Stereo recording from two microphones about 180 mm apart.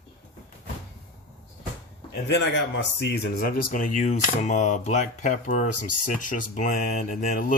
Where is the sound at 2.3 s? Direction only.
85° left.